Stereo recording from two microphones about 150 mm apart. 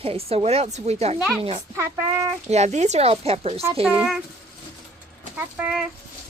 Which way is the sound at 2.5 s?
50° right (ahead or behind).